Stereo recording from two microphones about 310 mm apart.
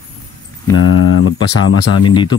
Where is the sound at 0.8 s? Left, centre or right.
Left.